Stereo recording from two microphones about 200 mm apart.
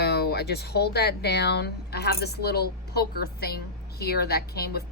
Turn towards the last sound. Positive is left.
turn(degrees=50)  # may be behind; listen again after turning